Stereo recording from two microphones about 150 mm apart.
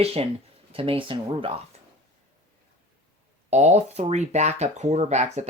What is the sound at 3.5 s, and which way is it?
Speech, 50° right (ahead or behind).